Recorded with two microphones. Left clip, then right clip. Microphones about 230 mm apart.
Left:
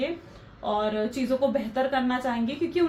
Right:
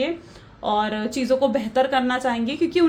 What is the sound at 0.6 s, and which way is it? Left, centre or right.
A woman's voice, right.